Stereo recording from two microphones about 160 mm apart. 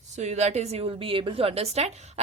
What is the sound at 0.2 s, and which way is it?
A woman's voice, 45° right (ahead or behind).